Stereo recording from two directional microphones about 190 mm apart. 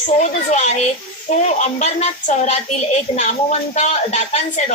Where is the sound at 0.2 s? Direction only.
35° left (ahead or behind).